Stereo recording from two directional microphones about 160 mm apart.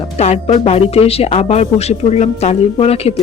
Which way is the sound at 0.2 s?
40° left (ahead or behind).